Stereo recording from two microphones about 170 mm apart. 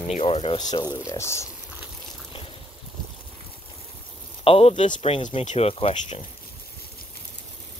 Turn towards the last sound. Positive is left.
turn(degrees=30)  # may be behind; listen again after turning